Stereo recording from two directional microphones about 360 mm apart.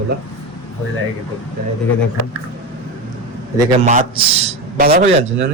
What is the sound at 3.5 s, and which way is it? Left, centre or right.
A man's voice, centre.